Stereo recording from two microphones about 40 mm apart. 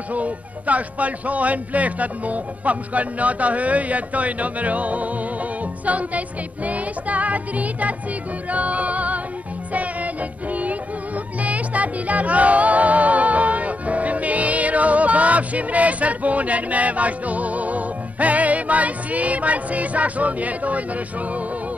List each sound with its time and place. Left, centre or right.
0.1 s speech: right
8.5 s music: right